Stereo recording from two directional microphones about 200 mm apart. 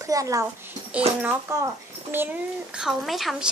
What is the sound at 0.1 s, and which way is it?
A child's voice, 15° right (ahead or behind).